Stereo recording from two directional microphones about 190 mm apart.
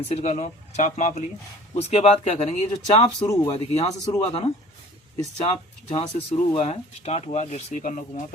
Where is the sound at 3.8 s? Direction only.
20° left (ahead or behind).